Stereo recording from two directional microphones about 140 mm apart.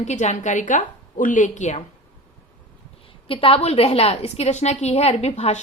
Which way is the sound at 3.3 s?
40° left (ahead or behind).